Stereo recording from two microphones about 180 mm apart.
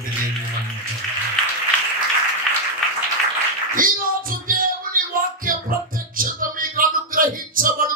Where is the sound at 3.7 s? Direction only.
50° right (ahead or behind).